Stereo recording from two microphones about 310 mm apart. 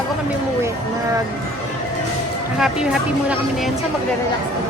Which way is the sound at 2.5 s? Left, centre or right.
Centre.